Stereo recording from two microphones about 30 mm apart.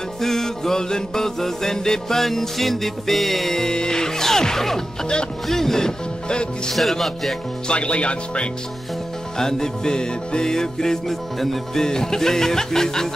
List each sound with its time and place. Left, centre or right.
0.2 s music: centre
3.6 s music: left
6.2 s music: left
6.7 s music: centre
7.6 s speech: left
9.4 s music: centre
11.3 s music: centre
11.8 s music: centre